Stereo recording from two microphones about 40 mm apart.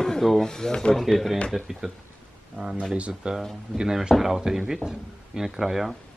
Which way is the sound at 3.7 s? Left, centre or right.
Centre.